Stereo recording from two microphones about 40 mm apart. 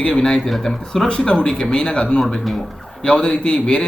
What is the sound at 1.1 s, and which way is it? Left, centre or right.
A man's voice, left.